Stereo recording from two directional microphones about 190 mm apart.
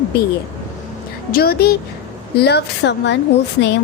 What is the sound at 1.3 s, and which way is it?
A woman's voice, 55° left (ahead or behind).